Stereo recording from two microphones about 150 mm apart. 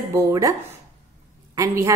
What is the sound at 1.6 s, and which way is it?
Speech, 20° right (ahead or behind).